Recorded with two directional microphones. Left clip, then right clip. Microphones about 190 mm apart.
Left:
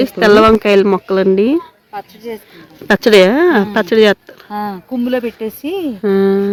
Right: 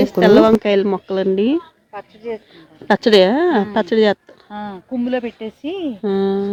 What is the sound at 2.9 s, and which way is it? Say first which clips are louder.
Speech: left 4 dB; centre (ahead or behind).